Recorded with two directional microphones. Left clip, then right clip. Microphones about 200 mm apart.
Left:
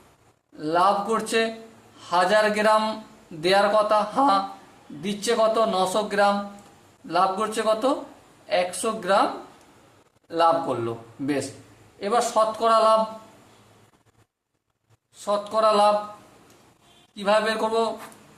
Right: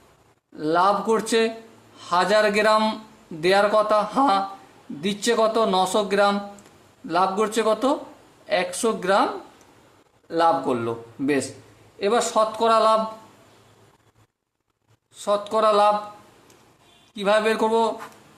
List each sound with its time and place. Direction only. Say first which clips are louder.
0.5 s speech: right 1 dB; 40° right (ahead or behind)
10.2 s speech: right 1 dB; 40° right (ahead or behind)
11.9 s speech: right 1 dB; 40° right (ahead or behind)
15.2 s speech: right 1 dB; 40° right (ahead or behind)
17.2 s speech: right 2 dB; 40° right (ahead or behind)